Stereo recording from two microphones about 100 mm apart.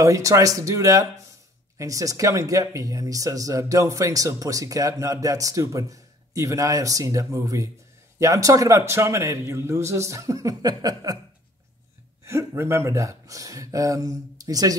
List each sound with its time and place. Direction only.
0.0 s speech: 30° right (ahead or behind)
12.3 s speech: 25° right (ahead or behind)